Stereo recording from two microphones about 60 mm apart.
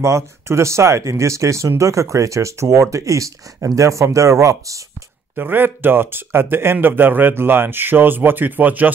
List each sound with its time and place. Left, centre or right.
0.0 s speech: right
5.3 s speech: right